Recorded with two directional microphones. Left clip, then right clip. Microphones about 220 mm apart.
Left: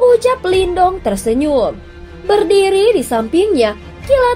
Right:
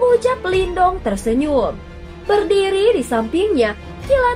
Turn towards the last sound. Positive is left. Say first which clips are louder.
# left 3 dB
turn(degrees=30)  # may be behind; listen again after turning